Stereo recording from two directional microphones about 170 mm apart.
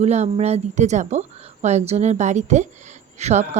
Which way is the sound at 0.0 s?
40° right (ahead or behind).